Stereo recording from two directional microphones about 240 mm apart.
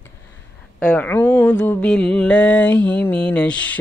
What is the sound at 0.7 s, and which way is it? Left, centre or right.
Mantra, centre.